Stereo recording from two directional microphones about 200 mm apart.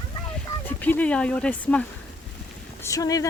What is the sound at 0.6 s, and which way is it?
Speech, 10° left (ahead or behind).